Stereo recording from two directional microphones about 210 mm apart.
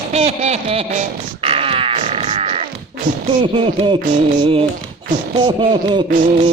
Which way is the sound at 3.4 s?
25° right (ahead or behind).